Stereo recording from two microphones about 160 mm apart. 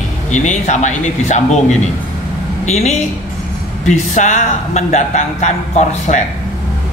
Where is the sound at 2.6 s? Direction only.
45° left (ahead or behind).